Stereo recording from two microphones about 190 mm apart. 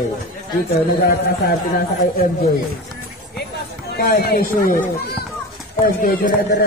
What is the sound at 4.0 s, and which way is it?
Speech, 55° left (ahead or behind).